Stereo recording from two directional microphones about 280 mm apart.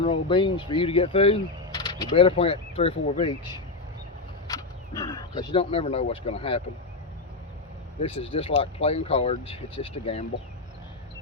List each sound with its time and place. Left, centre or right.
0.0 s speech: centre
4.4 s a sound: centre
5.3 s speech: centre
8.0 s speech: centre